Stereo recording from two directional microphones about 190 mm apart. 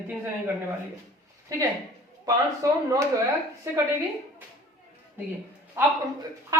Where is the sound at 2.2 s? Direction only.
15° right (ahead or behind).